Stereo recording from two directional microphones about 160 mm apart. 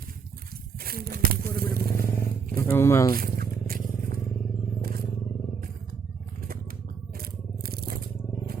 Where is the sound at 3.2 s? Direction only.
65° right (ahead or behind).